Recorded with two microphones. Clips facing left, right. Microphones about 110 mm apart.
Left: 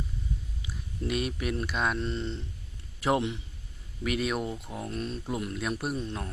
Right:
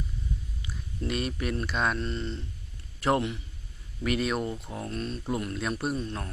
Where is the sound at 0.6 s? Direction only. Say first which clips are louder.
Even; 5° left (ahead or behind).